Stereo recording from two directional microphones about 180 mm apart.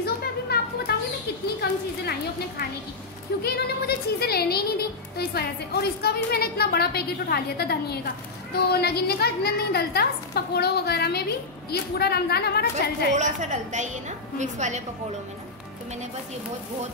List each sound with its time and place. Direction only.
0.0 s music: 60° left (ahead or behind)
3.4 s speech: 60° left (ahead or behind)
13.1 s a woman's voice: 40° right (ahead or behind)